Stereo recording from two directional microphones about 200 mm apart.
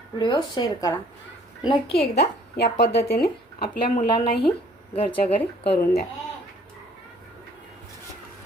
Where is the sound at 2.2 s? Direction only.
55° left (ahead or behind).